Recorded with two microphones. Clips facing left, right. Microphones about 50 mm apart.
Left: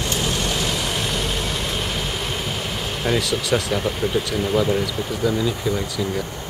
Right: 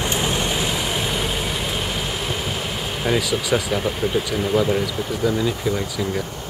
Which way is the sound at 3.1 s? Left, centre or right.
Centre.